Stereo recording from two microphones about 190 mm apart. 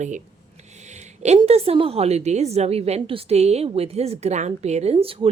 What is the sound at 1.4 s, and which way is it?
A woman's voice, 30° right (ahead or behind).